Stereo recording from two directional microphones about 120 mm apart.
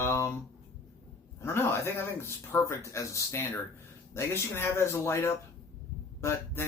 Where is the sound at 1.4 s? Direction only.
20° left (ahead or behind).